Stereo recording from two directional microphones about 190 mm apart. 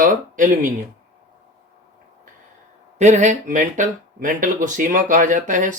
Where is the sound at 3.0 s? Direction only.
40° right (ahead or behind).